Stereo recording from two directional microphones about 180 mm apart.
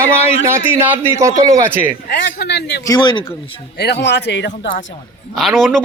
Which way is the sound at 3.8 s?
70° left (ahead or behind).